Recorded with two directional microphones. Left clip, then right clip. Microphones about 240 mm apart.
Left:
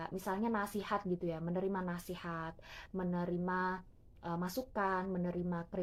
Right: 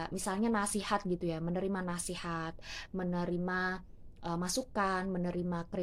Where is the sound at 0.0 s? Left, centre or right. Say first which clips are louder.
Right 3 dB; right.